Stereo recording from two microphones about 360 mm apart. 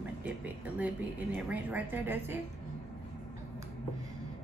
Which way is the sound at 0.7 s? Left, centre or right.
Centre.